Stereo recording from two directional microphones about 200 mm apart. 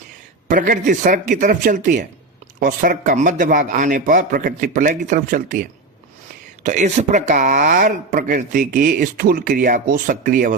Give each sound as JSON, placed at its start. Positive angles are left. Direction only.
{"t": 0.4, "sound": "a man's voice", "side_deg": -40}